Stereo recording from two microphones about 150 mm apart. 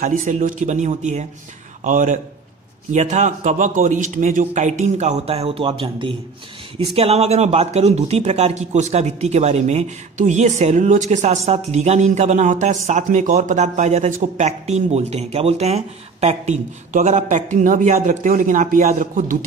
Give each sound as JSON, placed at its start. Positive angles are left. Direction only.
{"t": 0.0, "sound": "a man's voice", "side_deg": -55}